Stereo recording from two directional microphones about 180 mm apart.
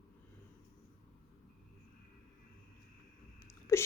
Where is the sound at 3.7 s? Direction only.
15° left (ahead or behind).